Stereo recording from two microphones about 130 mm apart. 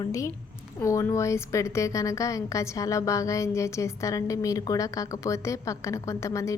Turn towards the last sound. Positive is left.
turn(degrees=25)  # may be behind; listen again after turning